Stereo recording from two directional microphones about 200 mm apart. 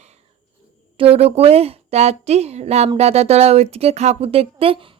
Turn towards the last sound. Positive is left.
turn(degrees=-25)  # may be behind; listen again after turning